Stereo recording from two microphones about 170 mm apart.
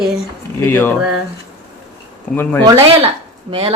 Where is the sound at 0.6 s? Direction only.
15° left (ahead or behind).